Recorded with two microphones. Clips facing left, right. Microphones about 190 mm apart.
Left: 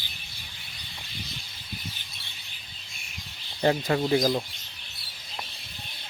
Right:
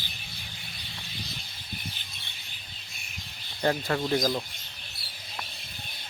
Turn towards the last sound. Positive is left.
turn(degrees=10)  # may be behind; listen again after turning